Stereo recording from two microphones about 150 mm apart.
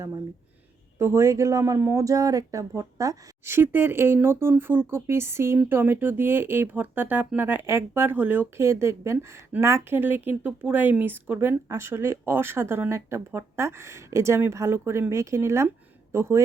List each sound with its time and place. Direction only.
0.9 s speech: 15° right (ahead or behind)